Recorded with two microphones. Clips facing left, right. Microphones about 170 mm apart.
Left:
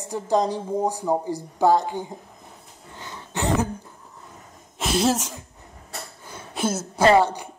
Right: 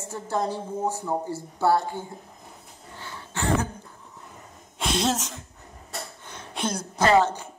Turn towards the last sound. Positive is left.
turn(degrees=15)  # may be behind; listen again after turning